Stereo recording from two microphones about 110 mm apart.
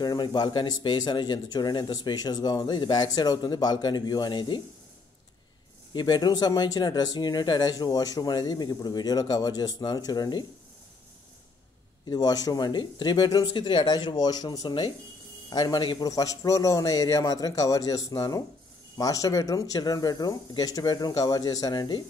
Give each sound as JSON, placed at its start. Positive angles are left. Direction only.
{"t": 0.0, "sound": "speech", "side_deg": 40}
{"t": 5.9, "sound": "speech", "side_deg": 40}
{"t": 12.1, "sound": "speech", "side_deg": 35}